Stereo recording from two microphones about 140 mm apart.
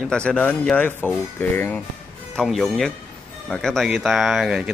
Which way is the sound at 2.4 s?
Centre (ahead or behind).